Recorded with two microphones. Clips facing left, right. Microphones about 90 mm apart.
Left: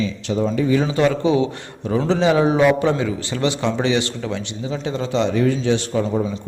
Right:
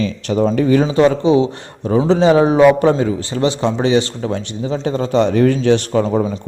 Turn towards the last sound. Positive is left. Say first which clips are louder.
# right 5 dB
turn(degrees=-60)  # may be behind; listen again after turning